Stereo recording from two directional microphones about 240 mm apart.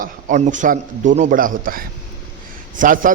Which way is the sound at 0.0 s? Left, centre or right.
Right.